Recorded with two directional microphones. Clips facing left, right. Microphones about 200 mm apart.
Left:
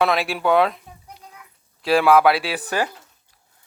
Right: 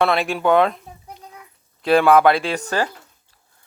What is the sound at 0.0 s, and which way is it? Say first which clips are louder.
Speech: right 2 dB; centre (ahead or behind).